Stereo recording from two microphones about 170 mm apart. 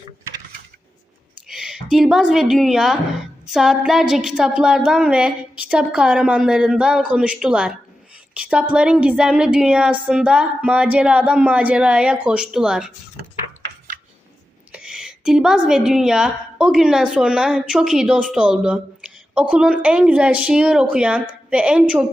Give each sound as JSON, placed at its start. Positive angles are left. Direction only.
{"t": 1.5, "sound": "a woman's voice", "side_deg": -5}
{"t": 8.3, "sound": "a sound", "side_deg": -5}
{"t": 8.7, "sound": "a woman's voice", "side_deg": -5}
{"t": 14.7, "sound": "a woman's voice", "side_deg": -5}